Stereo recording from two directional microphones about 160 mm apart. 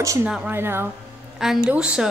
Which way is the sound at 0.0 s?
20° right (ahead or behind).